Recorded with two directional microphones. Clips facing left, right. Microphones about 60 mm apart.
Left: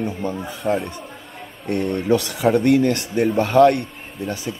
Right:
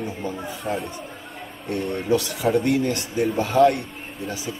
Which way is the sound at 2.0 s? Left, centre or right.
Left.